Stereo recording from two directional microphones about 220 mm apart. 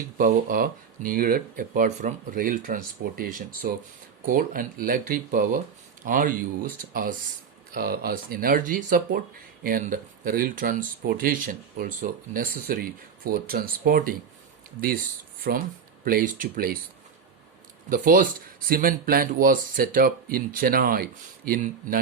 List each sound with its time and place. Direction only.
0.2 s speech: 40° right (ahead or behind)
15.5 s speech: 45° right (ahead or behind)
17.8 s speech: 40° right (ahead or behind)